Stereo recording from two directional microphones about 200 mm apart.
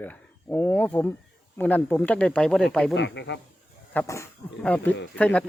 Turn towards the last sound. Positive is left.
turn(degrees=5)  # may be behind; listen again after turning